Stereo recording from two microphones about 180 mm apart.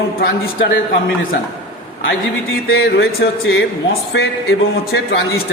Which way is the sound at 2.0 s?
90° left.